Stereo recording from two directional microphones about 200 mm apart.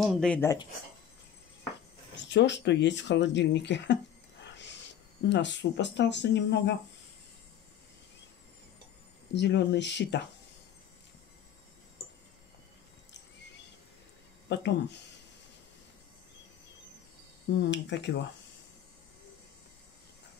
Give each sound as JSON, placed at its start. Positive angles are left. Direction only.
{"t": 0.0, "sound": "speech", "side_deg": 0}
{"t": 2.2, "sound": "speech", "side_deg": 60}
{"t": 9.3, "sound": "speech", "side_deg": 60}
{"t": 14.5, "sound": "speech", "side_deg": 60}
{"t": 17.6, "sound": "speech", "side_deg": 60}